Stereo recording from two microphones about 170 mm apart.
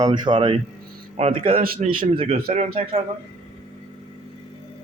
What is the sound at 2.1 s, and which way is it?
Speech, 30° right (ahead or behind).